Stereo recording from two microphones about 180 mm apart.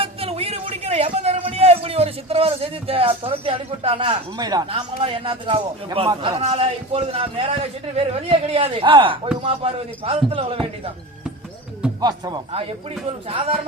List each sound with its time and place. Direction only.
0.0 s a sound: 35° right (ahead or behind)
4.7 s a man's voice: 30° right (ahead or behind)
11.9 s speech: 20° right (ahead or behind)